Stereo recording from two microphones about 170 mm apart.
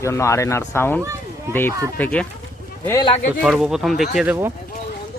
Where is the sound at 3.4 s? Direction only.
5° right (ahead or behind).